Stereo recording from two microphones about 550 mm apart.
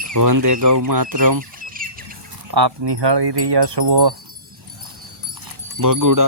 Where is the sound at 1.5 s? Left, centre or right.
Centre.